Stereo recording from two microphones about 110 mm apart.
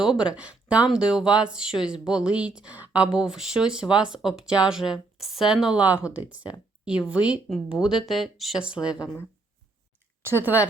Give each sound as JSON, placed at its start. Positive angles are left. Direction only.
{"t": 0.0, "sound": "speech", "side_deg": -5}
{"t": 10.2, "sound": "speech", "side_deg": -20}